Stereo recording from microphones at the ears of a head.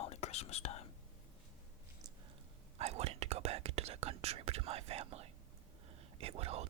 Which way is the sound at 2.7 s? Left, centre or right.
Right.